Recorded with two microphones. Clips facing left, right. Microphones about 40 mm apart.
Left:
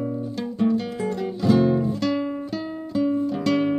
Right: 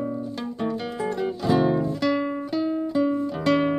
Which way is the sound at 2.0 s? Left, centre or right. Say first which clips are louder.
Right 1 dB; centre.